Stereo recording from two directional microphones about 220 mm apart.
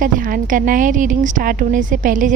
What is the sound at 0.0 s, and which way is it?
A woman's voice, 40° right (ahead or behind).